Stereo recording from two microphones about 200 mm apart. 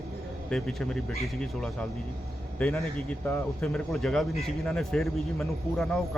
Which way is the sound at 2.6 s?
5° left (ahead or behind).